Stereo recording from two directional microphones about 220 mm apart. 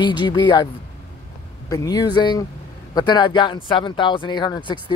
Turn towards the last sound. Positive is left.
turn(degrees=20)  # may be behind; listen again after turning